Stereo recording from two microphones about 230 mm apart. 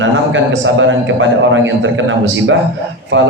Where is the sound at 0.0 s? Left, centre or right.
Right.